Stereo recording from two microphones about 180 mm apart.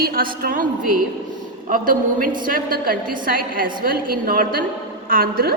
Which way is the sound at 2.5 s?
50° right (ahead or behind).